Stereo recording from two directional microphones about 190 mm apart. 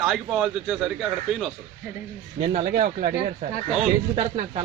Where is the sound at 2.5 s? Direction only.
40° right (ahead or behind).